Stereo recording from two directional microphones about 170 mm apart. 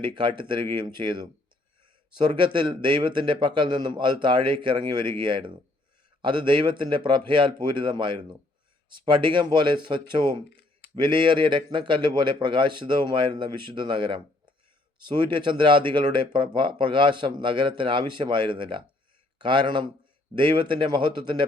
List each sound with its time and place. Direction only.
0.0 s speech: 30° right (ahead or behind)